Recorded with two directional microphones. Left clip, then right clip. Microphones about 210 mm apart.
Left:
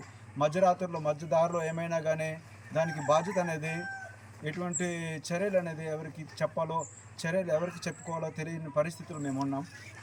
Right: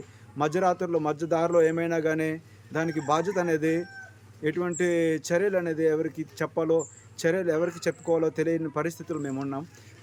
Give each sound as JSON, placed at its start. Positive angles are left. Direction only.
{"t": 0.3, "sound": "speech", "side_deg": -15}